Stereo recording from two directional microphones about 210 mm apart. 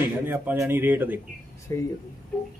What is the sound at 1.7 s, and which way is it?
Speech, 10° left (ahead or behind).